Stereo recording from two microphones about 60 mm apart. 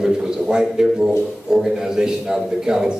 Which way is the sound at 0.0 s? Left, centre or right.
Centre.